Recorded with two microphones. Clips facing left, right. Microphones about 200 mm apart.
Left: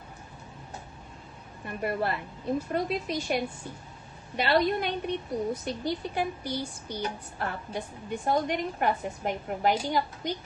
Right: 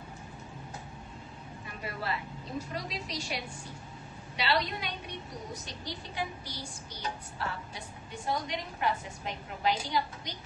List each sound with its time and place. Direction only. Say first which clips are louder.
1.7 s a woman's voice: left 8 dB; 55° left (ahead or behind)